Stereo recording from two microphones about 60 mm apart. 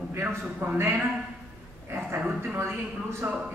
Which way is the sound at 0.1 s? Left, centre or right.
Right.